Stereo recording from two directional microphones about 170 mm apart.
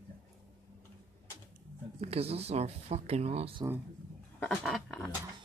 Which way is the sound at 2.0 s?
35° right (ahead or behind).